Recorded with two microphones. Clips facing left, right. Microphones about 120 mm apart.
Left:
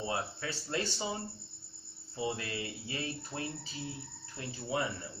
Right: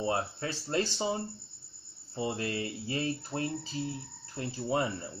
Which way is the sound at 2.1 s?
35° right (ahead or behind).